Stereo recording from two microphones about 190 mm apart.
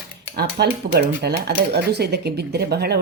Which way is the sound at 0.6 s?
60° right (ahead or behind).